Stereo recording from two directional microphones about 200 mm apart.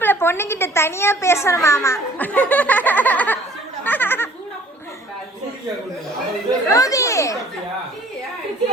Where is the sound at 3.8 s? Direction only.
10° left (ahead or behind).